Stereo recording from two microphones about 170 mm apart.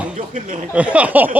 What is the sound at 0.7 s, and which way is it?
Speech, 5° right (ahead or behind).